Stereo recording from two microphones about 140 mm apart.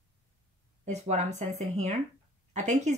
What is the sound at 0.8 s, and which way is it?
Speech, 55° right (ahead or behind).